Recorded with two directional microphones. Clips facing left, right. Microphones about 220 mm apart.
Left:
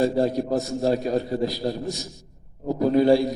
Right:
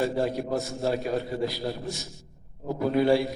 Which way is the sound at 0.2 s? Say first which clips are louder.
Left 5 dB; 40° left (ahead or behind).